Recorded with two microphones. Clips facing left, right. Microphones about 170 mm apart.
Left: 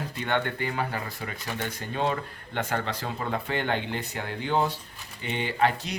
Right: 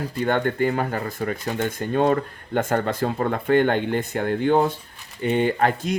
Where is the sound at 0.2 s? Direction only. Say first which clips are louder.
Right 7 dB; 40° right (ahead or behind).